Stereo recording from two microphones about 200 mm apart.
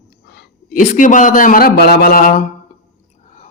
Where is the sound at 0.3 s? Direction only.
50° left (ahead or behind).